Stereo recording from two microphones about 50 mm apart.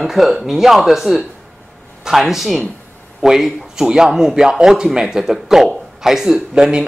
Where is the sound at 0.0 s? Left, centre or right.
Centre.